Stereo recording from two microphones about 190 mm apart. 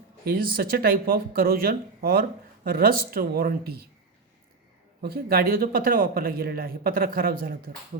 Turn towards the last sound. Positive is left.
turn(degrees=-50)  # may be behind; listen again after turning